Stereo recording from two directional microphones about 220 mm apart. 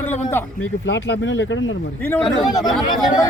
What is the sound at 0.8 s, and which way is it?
Speech, 60° left (ahead or behind).